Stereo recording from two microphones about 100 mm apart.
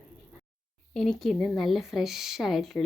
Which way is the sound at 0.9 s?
Centre (ahead or behind).